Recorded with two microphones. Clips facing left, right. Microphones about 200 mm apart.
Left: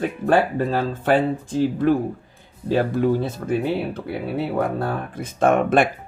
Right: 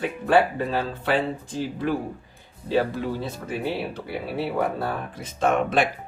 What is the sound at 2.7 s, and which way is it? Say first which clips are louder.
Speech: left 5 dB; 50° left (ahead or behind).